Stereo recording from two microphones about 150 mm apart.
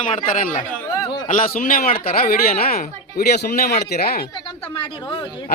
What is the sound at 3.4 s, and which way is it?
Speech, 90° left.